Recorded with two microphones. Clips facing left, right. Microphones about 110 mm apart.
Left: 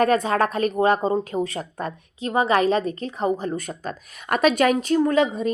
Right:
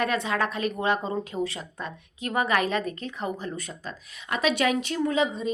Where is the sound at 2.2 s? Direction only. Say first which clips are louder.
Left 6 dB; 30° left (ahead or behind); by 5.2 s 50° left (ahead or behind).